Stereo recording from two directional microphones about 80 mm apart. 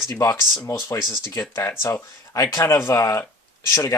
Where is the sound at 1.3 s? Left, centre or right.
Left.